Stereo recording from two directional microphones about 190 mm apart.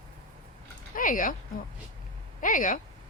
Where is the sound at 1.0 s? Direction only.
45° left (ahead or behind).